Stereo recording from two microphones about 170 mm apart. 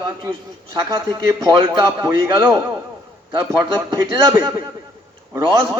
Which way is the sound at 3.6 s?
20° right (ahead or behind).